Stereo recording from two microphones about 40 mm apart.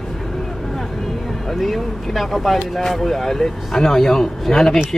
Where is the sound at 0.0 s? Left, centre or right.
Centre.